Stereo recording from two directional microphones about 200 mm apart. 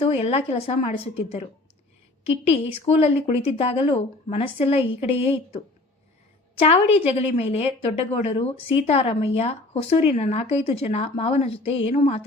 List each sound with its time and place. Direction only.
0.0 s a woman's voice: 30° left (ahead or behind)
7.1 s speech: 30° left (ahead or behind)